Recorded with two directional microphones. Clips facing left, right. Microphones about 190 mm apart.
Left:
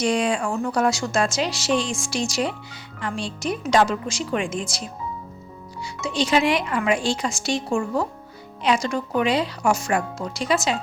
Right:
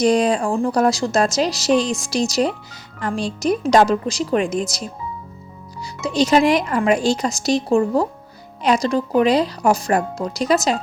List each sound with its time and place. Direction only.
0.0 s a woman's voice: 40° right (ahead or behind)